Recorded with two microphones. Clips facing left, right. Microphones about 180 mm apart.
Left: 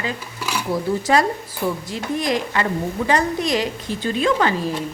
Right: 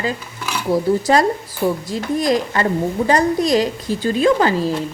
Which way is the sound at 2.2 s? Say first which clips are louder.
Right 4 dB; 35° right (ahead or behind).